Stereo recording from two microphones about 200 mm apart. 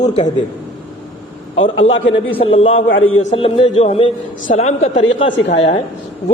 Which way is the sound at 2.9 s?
80° left.